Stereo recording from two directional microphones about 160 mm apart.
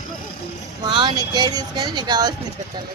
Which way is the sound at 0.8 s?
30° right (ahead or behind).